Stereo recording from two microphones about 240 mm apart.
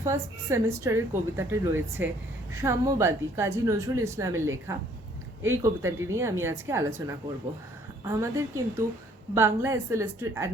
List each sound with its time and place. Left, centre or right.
0.0 s a woman's voice: centre